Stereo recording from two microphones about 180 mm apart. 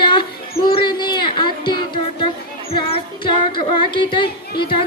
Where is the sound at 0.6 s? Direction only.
25° left (ahead or behind).